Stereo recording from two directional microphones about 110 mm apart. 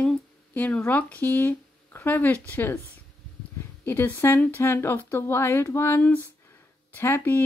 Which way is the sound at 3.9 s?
20° left (ahead or behind).